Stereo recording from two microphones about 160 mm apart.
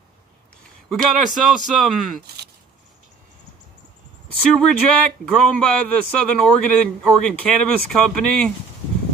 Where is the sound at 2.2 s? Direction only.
90° right.